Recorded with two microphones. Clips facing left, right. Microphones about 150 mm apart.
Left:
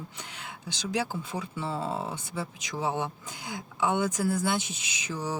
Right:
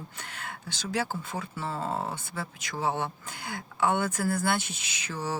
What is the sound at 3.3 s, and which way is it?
Speech, 60° right (ahead or behind).